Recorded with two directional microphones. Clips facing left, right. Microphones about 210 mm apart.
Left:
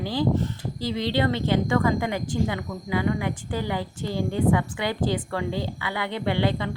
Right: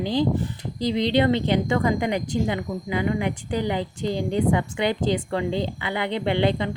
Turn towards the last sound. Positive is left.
turn(degrees=-20)  # may be behind; listen again after turning